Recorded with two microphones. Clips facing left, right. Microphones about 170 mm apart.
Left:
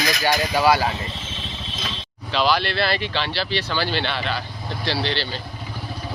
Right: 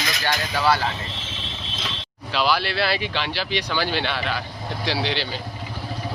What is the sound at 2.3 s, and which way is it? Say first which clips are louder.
Speech: left 2 dB; 10° right (ahead or behind).